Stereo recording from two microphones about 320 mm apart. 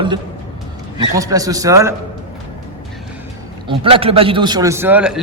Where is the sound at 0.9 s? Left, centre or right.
Centre.